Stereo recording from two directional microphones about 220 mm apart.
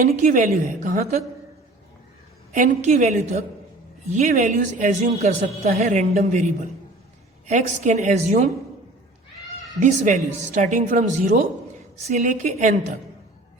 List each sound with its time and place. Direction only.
0.1 s a man's voice: 35° right (ahead or behind)
2.5 s a man's voice: 35° right (ahead or behind)
9.8 s a man's voice: 35° right (ahead or behind)